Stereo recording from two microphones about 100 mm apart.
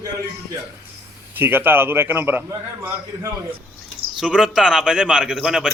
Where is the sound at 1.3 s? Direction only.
20° right (ahead or behind).